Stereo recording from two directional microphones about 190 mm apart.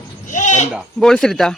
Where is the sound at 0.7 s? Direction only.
Centre (ahead or behind).